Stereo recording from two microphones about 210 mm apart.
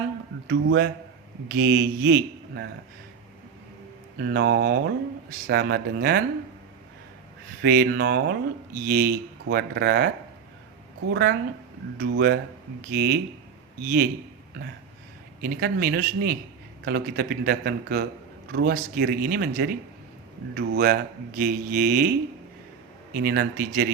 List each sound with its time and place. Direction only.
0.4 s a man's voice: 55° right (ahead or behind)
4.2 s speech: 50° right (ahead or behind)
7.6 s speech: 50° right (ahead or behind)
11.1 s speech: 50° right (ahead or behind)
15.4 s speech: 45° right (ahead or behind)
23.1 s speech: 45° right (ahead or behind)